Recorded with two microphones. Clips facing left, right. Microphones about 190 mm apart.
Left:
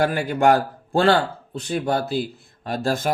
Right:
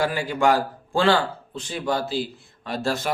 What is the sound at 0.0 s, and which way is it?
A man's voice, 55° left (ahead or behind).